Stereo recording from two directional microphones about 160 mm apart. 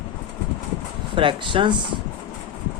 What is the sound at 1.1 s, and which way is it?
Speech, 30° right (ahead or behind).